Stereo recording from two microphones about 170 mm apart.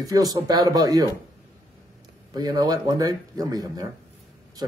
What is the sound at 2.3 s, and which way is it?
Speech, 25° right (ahead or behind).